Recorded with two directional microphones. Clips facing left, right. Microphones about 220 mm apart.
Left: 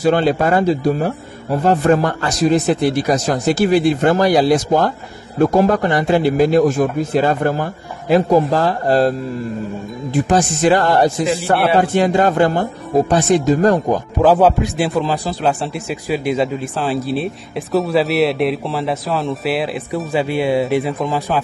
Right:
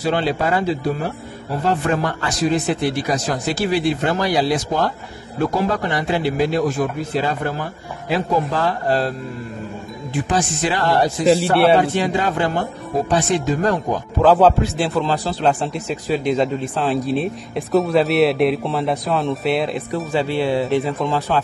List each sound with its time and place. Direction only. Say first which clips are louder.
0.0 s speech: left 5 dB; 50° left (ahead or behind)
10.1 s speech: left 5 dB; 45° left (ahead or behind)
14.2 s a man's voice: left 1 dB; 10° left (ahead or behind)